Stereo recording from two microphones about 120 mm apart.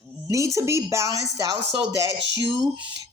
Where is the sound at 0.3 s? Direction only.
25° right (ahead or behind).